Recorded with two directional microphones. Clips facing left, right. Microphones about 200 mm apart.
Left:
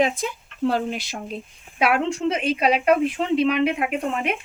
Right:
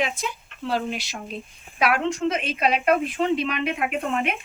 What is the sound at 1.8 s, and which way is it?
Speech, 30° left (ahead or behind).